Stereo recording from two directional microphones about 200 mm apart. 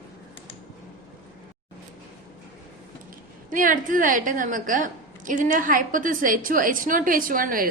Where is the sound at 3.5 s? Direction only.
40° right (ahead or behind).